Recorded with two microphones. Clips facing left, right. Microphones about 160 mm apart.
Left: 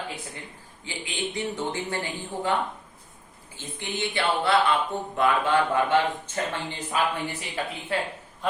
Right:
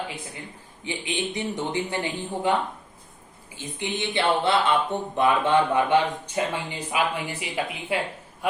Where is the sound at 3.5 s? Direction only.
20° right (ahead or behind).